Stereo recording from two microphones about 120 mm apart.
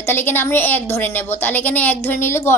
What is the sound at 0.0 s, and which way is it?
A woman's voice, 15° left (ahead or behind).